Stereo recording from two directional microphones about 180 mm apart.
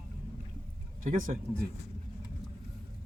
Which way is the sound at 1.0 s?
45° right (ahead or behind).